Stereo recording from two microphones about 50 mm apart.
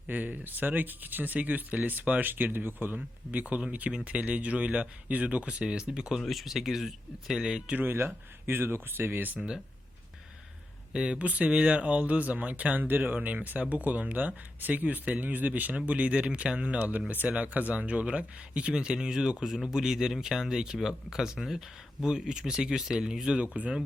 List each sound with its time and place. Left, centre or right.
0.1 s speech: right; by 7.8 s centre
7.8 s speech: right
10.9 s speech: right
16.7 s speech: right; by 23.4 s centre
23.4 s speech: right